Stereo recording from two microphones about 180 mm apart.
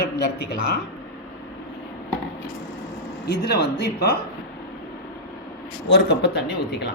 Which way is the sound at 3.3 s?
65° left (ahead or behind).